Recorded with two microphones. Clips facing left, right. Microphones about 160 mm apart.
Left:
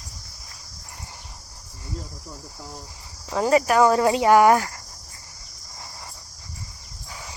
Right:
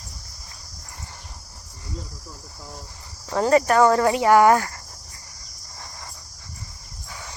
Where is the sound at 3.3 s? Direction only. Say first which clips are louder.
Right 1 dB; 5° left (ahead or behind).